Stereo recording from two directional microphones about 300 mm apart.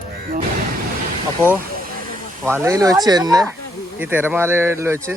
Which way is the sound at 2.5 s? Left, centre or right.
Centre.